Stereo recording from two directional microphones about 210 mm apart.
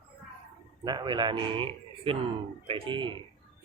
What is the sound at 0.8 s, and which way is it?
Speech, 20° right (ahead or behind).